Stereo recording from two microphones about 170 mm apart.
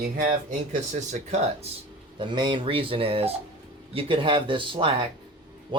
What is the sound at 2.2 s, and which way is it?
Speech, 30° right (ahead or behind).